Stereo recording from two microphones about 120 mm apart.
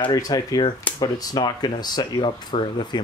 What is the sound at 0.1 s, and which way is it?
Speech, 30° left (ahead or behind).